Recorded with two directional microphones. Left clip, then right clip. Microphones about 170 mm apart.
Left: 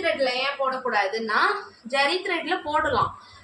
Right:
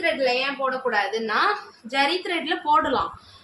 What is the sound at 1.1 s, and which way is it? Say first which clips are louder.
A woman's voice: even; 25° right (ahead or behind).